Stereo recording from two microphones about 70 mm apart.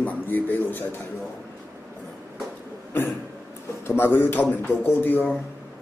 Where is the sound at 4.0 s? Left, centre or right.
Left.